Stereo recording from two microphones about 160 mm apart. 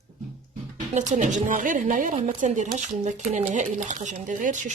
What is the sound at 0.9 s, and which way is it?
Speech, 50° right (ahead or behind).